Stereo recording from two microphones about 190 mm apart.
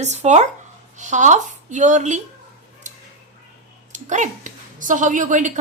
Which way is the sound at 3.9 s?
40° right (ahead or behind).